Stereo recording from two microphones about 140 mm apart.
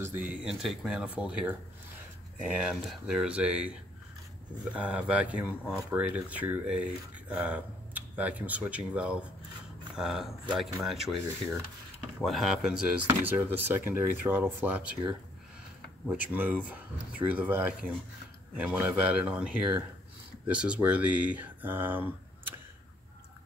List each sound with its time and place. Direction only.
0.0 s speech: 10° right (ahead or behind)
4.7 s speech: 10° right (ahead or behind)
12.2 s speech: centre (ahead or behind)
13.0 s speech: 15° right (ahead or behind)
16.3 s speech: 15° right (ahead or behind)